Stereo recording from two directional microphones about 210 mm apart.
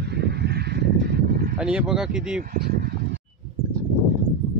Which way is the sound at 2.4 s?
45° right (ahead or behind).